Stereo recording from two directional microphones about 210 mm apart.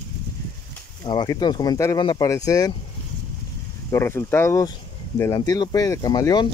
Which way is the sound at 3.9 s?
10° left (ahead or behind).